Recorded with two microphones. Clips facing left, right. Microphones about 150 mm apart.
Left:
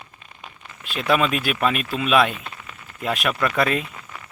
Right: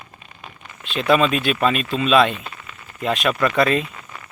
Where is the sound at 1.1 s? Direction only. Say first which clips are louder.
Right 3 dB; 5° left (ahead or behind).